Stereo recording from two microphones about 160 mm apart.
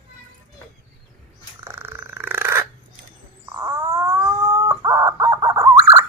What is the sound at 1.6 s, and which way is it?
Dog, 15° right (ahead or behind).